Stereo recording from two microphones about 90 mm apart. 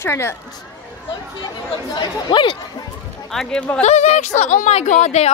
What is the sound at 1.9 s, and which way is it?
Speech, 60° left (ahead or behind).